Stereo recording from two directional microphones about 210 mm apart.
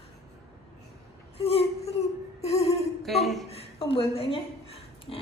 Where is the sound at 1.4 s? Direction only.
30° left (ahead or behind).